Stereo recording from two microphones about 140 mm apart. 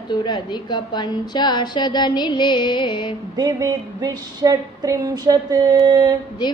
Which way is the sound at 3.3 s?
30° right (ahead or behind).